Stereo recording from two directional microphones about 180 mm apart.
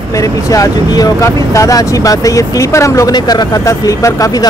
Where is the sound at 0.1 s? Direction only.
20° left (ahead or behind).